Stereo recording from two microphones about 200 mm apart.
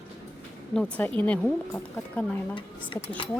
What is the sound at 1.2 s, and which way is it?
Speech, 5° left (ahead or behind).